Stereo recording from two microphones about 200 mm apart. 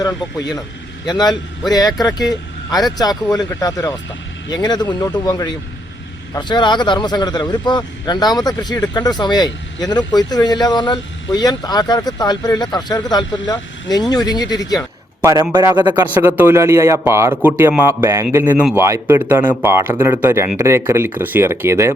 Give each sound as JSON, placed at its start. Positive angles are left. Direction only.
{"t": 0.0, "sound": "speech", "side_deg": 20}
{"t": 15.2, "sound": "a man's voice", "side_deg": -15}
{"t": 16.1, "sound": "a man's voice", "side_deg": -10}